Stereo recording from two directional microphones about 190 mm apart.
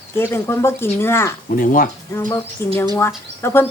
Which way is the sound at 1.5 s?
45° left (ahead or behind).